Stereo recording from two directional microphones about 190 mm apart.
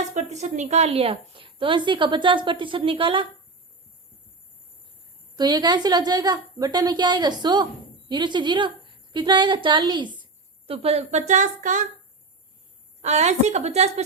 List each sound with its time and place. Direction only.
0.1 s a woman's voice: 35° right (ahead or behind)
5.4 s a woman's voice: 20° right (ahead or behind); by 11.8 s 40° right (ahead or behind)
13.0 s speech: 35° right (ahead or behind)